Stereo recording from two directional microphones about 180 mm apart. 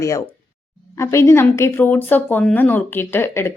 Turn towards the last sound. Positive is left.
turn(degrees=15)  # may be behind; listen again after turning